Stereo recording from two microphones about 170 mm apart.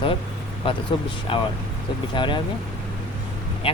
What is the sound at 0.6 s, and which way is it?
Speech, 30° left (ahead or behind).